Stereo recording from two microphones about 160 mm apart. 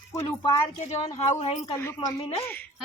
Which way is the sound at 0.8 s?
45° left (ahead or behind).